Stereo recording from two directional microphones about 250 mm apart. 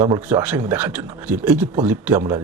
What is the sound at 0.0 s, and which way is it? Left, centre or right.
Speech, centre.